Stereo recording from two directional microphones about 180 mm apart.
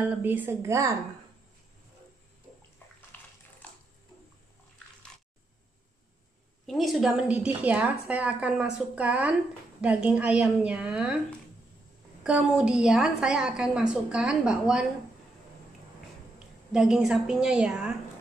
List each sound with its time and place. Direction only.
0.0 s a woman's voice: 10° right (ahead or behind)
3.1 s bathtub: 10° left (ahead or behind)
6.6 s a woman's voice: centre (ahead or behind)
12.2 s a woman's voice: 5° right (ahead or behind)
16.3 s a woman's voice: 5° right (ahead or behind)